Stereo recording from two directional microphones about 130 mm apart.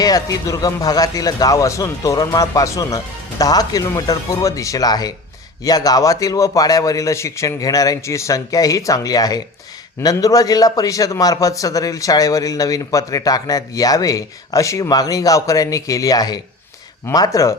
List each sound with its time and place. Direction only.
0.0 s a man's voice: 25° left (ahead or behind)